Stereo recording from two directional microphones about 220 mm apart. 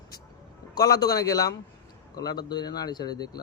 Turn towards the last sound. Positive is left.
turn(degrees=20)  # may be behind; listen again after turning